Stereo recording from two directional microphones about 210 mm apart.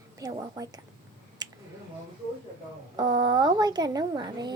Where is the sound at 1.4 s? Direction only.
20° right (ahead or behind).